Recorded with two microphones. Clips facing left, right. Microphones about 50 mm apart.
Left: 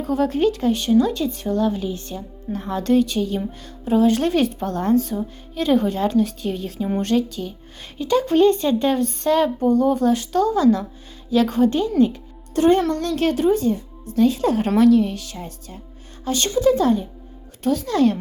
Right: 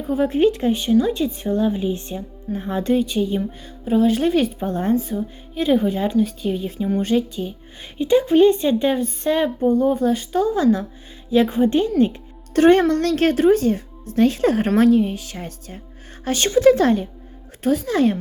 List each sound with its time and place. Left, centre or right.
0.0 s speech: centre
0.7 s a woman's voice: centre
1.0 s a woman's voice: right
3.4 s speech: centre
4.6 s a woman's voice: centre
10.5 s speech: right
12.5 s a child's voice: right
14.8 s speech: right
15.3 s speech: right
17.6 s speech: right